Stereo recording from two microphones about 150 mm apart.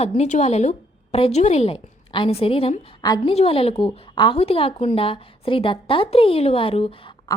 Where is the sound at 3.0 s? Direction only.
25° left (ahead or behind).